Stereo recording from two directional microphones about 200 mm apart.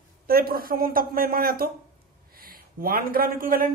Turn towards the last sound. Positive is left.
turn(degrees=-45)  # may be behind; listen again after turning